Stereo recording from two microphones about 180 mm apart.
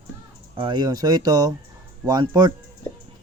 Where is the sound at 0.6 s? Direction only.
25° right (ahead or behind).